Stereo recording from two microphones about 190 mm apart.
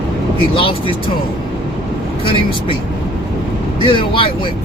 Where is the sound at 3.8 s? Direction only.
25° left (ahead or behind).